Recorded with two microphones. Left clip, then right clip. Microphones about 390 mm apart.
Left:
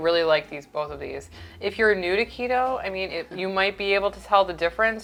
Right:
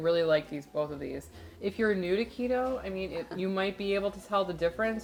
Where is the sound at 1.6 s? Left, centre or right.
Left.